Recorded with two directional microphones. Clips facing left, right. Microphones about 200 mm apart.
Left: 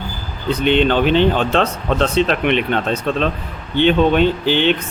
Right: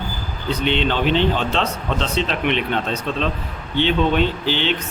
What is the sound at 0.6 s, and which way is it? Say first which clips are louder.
Speech: left 6 dB; 50° left (ahead or behind).